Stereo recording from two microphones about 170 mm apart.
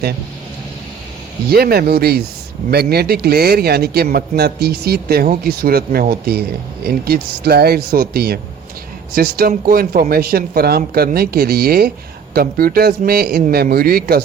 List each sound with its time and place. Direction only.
1.5 s a man's voice: 65° right (ahead or behind)